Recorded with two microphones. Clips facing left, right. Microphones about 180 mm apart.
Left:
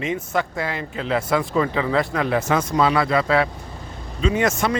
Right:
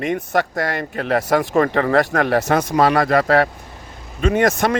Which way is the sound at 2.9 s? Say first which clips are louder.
Right 3 dB; 45° right (ahead or behind).